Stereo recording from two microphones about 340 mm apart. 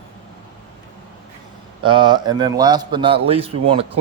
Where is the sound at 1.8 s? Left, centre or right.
Centre.